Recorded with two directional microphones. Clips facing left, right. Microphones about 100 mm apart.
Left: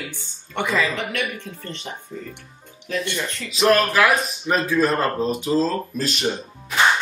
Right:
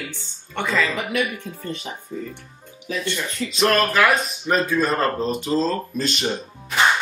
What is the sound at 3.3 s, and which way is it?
Speech, centre (ahead or behind).